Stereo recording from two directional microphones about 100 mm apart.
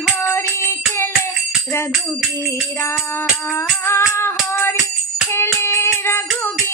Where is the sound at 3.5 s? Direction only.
25° left (ahead or behind).